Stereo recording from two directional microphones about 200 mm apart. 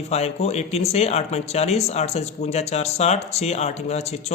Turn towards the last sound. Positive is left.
turn(degrees=30)  # may be behind; listen again after turning